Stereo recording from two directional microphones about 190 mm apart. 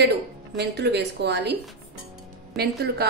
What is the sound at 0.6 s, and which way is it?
A woman's voice, 65° right (ahead or behind).